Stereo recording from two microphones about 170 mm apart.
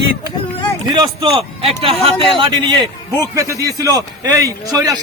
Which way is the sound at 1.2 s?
35° right (ahead or behind).